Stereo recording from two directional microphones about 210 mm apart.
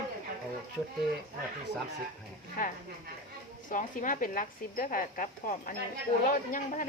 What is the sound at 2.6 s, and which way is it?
A woman's voice, 40° left (ahead or behind).